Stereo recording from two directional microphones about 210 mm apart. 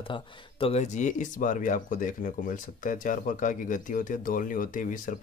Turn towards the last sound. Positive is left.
turn(degrees=40)  # may be behind; listen again after turning